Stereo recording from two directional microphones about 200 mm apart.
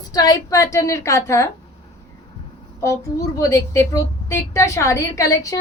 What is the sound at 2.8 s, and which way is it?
A woman's voice, 15° left (ahead or behind).